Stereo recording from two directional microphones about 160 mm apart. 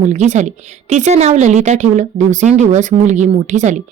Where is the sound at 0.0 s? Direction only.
50° right (ahead or behind).